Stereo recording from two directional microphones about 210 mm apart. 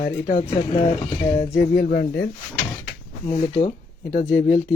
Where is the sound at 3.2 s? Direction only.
30° left (ahead or behind).